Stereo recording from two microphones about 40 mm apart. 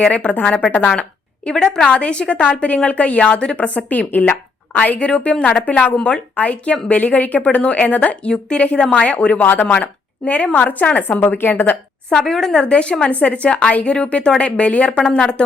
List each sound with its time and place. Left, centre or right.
0.0 s a woman's voice: left
1.5 s a woman's voice: left
3.8 s a woman's voice: left
4.9 s a woman's voice: left
5.6 s a woman's voice: left
8.2 s a woman's voice: left
11.3 s a woman's voice: left
12.1 s a woman's voice: centre
12.6 s a woman's voice: left